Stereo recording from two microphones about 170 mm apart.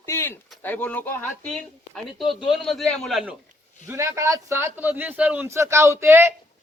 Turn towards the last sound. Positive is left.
turn(degrees=-15)  # may be behind; listen again after turning